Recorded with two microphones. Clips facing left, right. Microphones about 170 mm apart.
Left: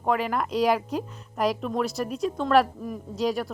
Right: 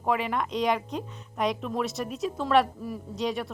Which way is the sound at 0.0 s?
Centre (ahead or behind).